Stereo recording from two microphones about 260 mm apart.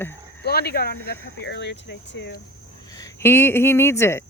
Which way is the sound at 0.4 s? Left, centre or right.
Left.